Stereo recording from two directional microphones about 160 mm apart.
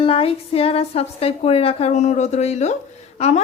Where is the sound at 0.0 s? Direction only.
35° left (ahead or behind).